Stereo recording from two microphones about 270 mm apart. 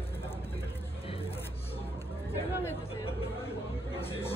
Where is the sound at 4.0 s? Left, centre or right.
Left.